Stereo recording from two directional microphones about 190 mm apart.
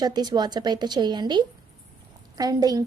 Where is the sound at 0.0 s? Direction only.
20° right (ahead or behind).